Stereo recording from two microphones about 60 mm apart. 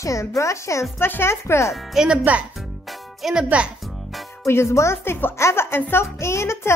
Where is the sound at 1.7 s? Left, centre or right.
Centre.